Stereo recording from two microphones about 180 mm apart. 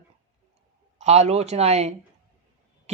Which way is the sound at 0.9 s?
40° right (ahead or behind).